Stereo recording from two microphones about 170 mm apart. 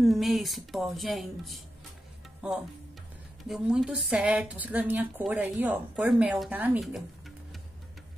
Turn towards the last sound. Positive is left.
turn(degrees=-5)  # may be behind; listen again after turning